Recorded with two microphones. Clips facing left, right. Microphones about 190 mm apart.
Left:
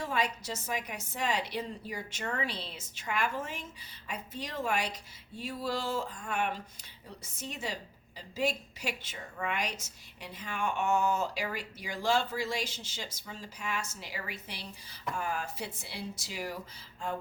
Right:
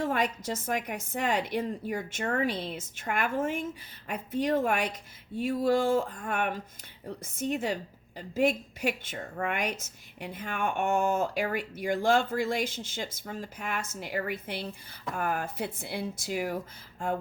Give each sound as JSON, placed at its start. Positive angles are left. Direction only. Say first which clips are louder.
{"t": 0.0, "sound": "a woman's voice", "louder": "right 4 dB", "side_deg": -50}